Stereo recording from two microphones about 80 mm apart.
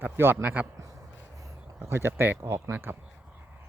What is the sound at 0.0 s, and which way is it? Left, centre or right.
Speech, right.